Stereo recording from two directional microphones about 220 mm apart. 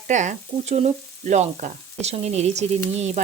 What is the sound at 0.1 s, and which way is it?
Frying, 35° right (ahead or behind).